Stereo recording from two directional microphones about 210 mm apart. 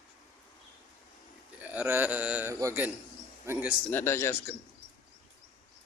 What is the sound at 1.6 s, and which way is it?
A man's voice, 5° right (ahead or behind).